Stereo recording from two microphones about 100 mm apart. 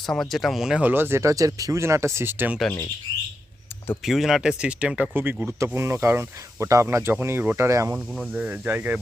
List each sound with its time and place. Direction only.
0.0 s speech: 5° left (ahead or behind); by 2.6 s 20° right (ahead or behind)
4.0 s speech: centre (ahead or behind); by 7.9 s 30° right (ahead or behind)
7.9 s speech: 5° right (ahead or behind)
8.3 s speech: 15° right (ahead or behind)